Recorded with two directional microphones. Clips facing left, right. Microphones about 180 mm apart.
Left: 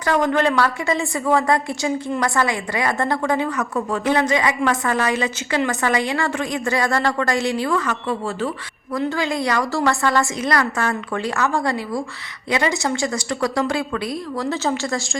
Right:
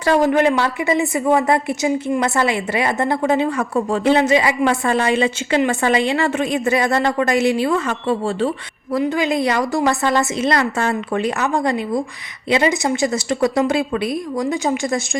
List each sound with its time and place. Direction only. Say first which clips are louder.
0.0 s a woman's voice: right 4 dB; 25° right (ahead or behind)